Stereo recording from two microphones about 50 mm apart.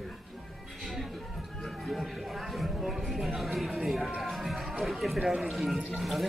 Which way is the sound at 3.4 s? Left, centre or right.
Centre.